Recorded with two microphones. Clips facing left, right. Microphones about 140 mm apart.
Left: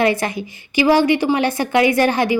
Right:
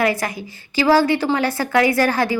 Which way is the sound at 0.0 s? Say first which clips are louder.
Left 2 dB; 25° left (ahead or behind).